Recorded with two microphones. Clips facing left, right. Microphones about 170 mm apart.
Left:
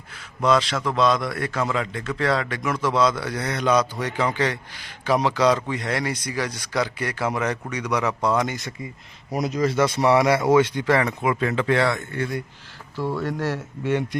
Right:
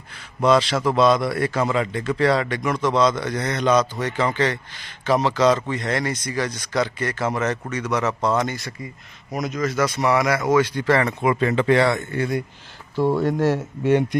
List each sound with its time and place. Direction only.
0.1 s a man's voice: centre (ahead or behind); by 8.9 s 20° left (ahead or behind)
9.3 s speech: 30° left (ahead or behind)
10.8 s speech: 10° left (ahead or behind); by 12.4 s 10° right (ahead or behind)
13.0 s speech: 25° right (ahead or behind)